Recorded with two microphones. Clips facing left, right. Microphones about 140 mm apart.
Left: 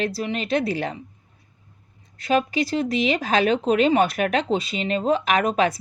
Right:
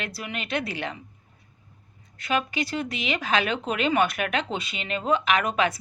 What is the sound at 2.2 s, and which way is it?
Speech, 35° left (ahead or behind).